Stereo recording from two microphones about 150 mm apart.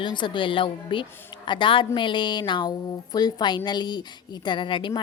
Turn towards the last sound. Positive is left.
turn(degrees=35)  # may be behind; listen again after turning